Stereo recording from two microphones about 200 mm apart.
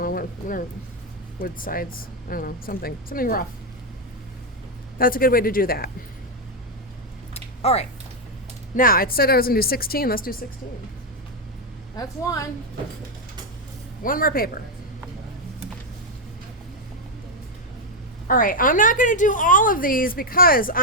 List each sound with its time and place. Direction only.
0.0 s a sound: 45° left (ahead or behind)
1.4 s a woman's voice: 45° left (ahead or behind)
4.9 s a woman's voice: 45° left (ahead or behind)
7.3 s a sound: 30° left (ahead or behind)
8.7 s a woman's voice: 45° left (ahead or behind)
11.9 s a woman's voice: 15° left (ahead or behind)
14.0 s a woman's voice: 45° left (ahead or behind)
18.3 s a woman's voice: 45° left (ahead or behind)